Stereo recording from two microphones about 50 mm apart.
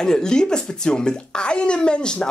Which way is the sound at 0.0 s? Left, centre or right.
Centre.